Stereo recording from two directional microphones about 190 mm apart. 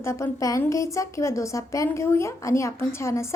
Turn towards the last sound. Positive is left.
turn(degrees=15)  # may be behind; listen again after turning